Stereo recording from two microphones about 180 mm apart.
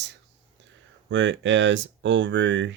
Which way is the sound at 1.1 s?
90° right.